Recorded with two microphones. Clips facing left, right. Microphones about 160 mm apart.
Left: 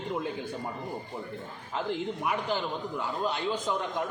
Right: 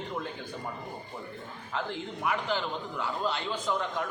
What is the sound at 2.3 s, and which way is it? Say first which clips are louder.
A man's voice: left 1 dB; 10° left (ahead or behind).